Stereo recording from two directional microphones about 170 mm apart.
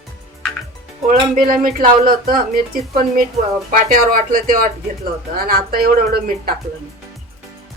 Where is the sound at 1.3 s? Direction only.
55° right (ahead or behind).